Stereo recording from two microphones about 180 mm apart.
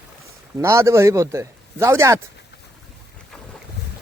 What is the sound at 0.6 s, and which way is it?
Speech, 15° right (ahead or behind).